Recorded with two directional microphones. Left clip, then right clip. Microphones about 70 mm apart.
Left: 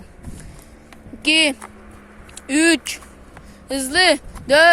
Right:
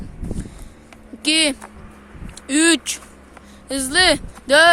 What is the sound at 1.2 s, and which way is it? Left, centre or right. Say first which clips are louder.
Speech: left 2 dB; centre.